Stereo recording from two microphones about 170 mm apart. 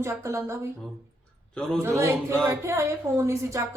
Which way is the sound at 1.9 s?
15° right (ahead or behind).